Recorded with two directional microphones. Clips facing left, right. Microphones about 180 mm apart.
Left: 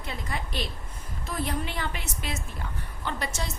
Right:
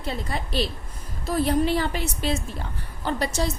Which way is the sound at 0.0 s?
35° right (ahead or behind).